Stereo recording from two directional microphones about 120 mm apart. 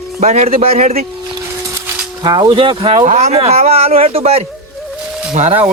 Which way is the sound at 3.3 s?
60° right (ahead or behind).